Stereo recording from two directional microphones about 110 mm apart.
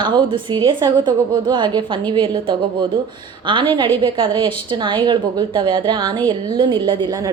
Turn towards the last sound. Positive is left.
turn(degrees=-40)  # may be behind; listen again after turning